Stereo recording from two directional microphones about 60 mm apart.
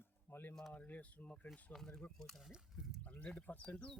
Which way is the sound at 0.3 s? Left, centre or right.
Left.